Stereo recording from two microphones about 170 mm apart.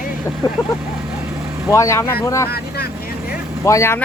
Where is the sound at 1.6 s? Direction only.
20° left (ahead or behind).